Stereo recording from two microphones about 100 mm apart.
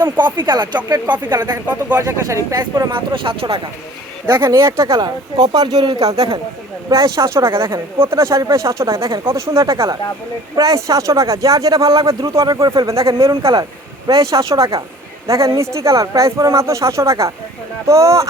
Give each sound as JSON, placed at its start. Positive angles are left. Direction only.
{"t": 0.3, "sound": "speech", "side_deg": -50}
{"t": 1.0, "sound": "speech", "side_deg": -15}
{"t": 2.0, "sound": "speech", "side_deg": -30}
{"t": 2.9, "sound": "speech", "side_deg": -55}
{"t": 4.3, "sound": "speech", "side_deg": -25}
{"t": 4.9, "sound": "speech", "side_deg": -45}
{"t": 6.1, "sound": "speech", "side_deg": -75}
{"t": 6.9, "sound": "speech", "side_deg": -35}
{"t": 13.5, "sound": "speech", "side_deg": -45}
{"t": 14.1, "sound": "speech", "side_deg": -35}